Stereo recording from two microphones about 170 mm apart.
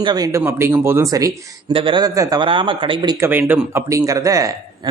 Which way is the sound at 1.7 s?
30° right (ahead or behind).